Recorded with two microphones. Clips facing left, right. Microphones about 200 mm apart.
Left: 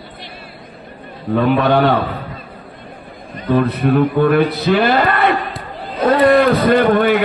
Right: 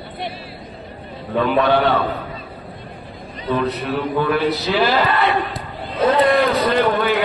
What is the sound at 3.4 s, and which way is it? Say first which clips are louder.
A man's voice: left 5 dB; 50° left (ahead or behind).